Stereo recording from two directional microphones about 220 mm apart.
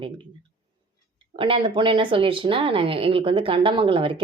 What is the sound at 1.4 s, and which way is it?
Speech, 25° right (ahead or behind).